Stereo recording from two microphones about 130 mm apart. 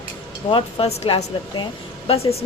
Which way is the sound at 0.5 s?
50° left (ahead or behind).